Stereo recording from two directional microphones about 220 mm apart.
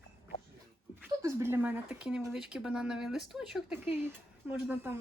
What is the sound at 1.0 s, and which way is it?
Speech, 10° right (ahead or behind).